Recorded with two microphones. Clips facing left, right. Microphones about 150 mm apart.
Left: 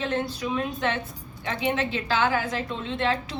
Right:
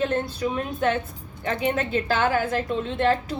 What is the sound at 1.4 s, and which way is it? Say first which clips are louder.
A woman's voice: right 2 dB; 50° right (ahead or behind).